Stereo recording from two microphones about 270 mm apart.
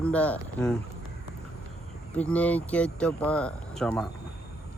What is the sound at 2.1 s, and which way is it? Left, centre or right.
Speech, centre.